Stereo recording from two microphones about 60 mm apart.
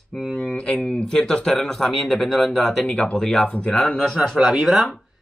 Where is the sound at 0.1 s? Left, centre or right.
Centre.